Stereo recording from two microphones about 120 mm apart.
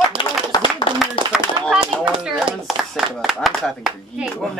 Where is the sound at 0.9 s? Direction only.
50° left (ahead or behind).